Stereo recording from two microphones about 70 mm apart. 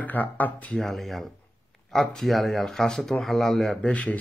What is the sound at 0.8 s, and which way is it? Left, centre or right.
Speech, centre.